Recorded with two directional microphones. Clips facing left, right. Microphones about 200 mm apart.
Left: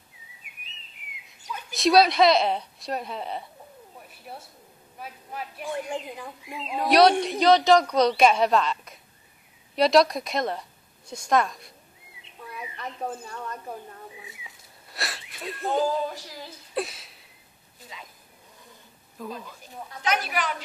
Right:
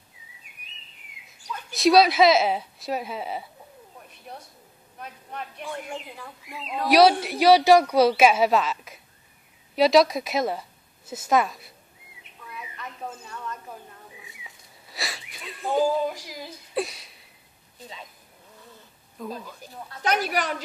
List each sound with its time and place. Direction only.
1.7 s a woman's voice: centre (ahead or behind)
4.1 s a sound: 5° left (ahead or behind)
4.9 s speech: 5° left (ahead or behind)
6.9 s a woman's voice: 5° right (ahead or behind)
12.2 s bird: 30° left (ahead or behind)
14.9 s a woman's voice: centre (ahead or behind)
16.7 s a sound: centre (ahead or behind)
19.2 s a woman's voice: centre (ahead or behind)
20.0 s a woman's voice: 40° right (ahead or behind)